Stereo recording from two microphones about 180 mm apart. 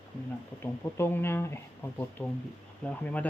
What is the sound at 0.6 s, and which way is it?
Speech, 15° left (ahead or behind).